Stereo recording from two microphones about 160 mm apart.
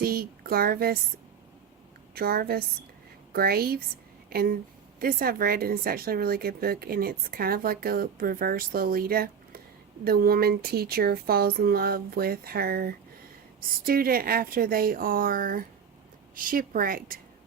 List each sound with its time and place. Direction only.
0.0 s a woman's voice: 70° right (ahead or behind)
2.1 s a woman's voice: 70° right (ahead or behind)